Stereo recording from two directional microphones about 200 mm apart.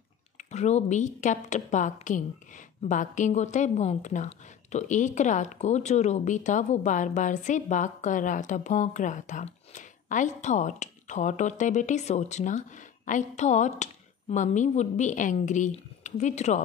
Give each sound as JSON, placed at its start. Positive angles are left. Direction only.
{"t": 0.5, "sound": "a woman's voice", "side_deg": 35}